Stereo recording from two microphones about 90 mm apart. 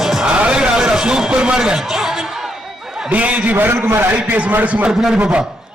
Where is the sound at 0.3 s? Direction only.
15° right (ahead or behind).